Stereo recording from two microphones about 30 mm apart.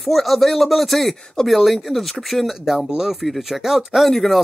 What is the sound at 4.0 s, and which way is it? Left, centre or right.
Speech, centre.